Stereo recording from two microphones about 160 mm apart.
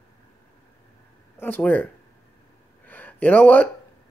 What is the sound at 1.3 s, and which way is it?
Speech, 10° left (ahead or behind).